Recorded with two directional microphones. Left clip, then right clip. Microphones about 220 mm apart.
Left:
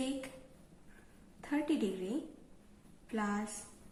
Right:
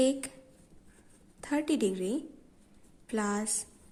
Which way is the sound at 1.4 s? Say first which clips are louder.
Right 5 dB; 50° right (ahead or behind).